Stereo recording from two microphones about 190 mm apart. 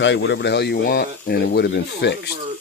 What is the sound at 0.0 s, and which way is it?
Speech, 70° left (ahead or behind).